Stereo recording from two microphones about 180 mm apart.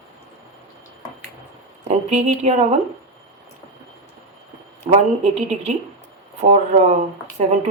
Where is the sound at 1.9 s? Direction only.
40° right (ahead or behind).